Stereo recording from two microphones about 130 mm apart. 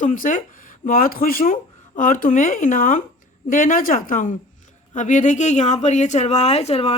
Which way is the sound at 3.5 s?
90° left.